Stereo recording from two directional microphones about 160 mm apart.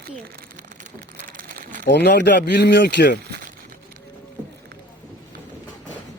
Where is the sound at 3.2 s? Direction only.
90° right.